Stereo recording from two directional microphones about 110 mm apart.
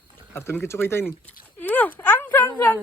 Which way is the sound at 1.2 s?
15° left (ahead or behind).